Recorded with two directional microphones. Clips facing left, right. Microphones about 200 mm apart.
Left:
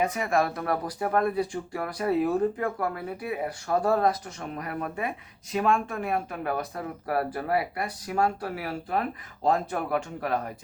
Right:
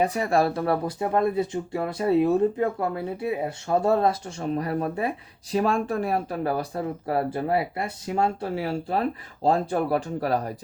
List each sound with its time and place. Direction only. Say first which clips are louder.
0.0 s speech: right 3 dB; 35° right (ahead or behind)